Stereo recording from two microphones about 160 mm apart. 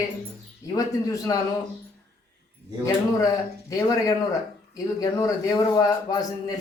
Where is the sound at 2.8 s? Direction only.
20° left (ahead or behind).